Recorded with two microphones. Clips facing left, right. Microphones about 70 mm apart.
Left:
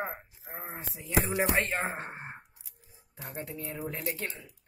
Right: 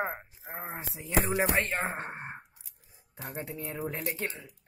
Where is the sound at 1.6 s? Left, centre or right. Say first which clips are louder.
Even; centre.